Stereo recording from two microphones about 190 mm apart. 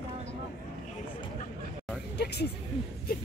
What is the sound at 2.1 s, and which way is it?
Vehicle, 60° left (ahead or behind).